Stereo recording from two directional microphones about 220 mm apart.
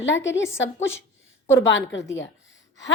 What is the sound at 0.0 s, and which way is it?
Speech, 55° left (ahead or behind).